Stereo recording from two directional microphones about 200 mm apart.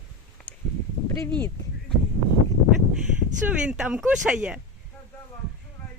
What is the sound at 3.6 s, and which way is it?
Speech, 5° right (ahead or behind).